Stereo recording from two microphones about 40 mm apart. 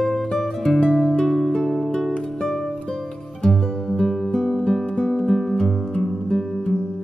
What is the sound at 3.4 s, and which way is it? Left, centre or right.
Music, centre.